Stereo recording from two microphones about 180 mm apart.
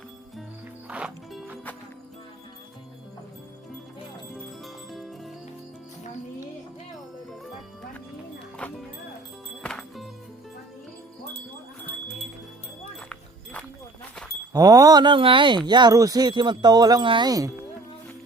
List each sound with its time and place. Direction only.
0.9 s music: 5° right (ahead or behind)
4.6 s music: centre (ahead or behind)
8.6 s speech: 5° left (ahead or behind)
9.6 s music: centre (ahead or behind)
13.1 s music: 5° left (ahead or behind)
14.5 s speech: 20° right (ahead or behind)